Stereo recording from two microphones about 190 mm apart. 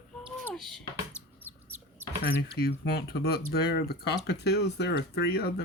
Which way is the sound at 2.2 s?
55° left (ahead or behind).